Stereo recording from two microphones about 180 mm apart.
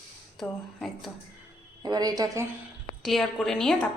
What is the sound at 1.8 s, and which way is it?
Speech, 20° right (ahead or behind).